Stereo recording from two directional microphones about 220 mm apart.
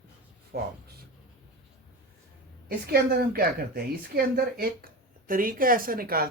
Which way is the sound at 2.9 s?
45° right (ahead or behind).